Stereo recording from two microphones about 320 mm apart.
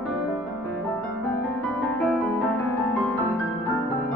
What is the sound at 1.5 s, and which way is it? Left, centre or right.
Music, centre.